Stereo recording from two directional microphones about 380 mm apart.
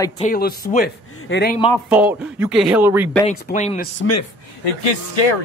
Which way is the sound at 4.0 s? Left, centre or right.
Left.